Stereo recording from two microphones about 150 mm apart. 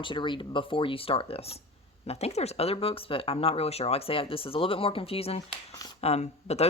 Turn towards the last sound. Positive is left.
turn(degrees=45)  # may be behind; listen again after turning